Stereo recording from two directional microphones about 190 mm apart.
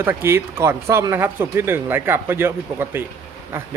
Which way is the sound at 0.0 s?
10° right (ahead or behind).